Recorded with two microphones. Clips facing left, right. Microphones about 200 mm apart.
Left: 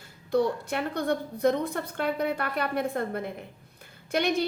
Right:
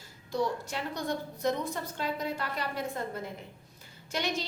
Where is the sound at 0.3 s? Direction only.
60° left (ahead or behind).